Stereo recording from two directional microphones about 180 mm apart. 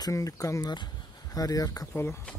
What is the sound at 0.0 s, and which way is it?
Speech, 20° left (ahead or behind).